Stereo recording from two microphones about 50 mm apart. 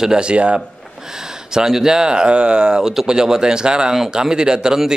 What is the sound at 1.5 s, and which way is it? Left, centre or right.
A man's voice, centre.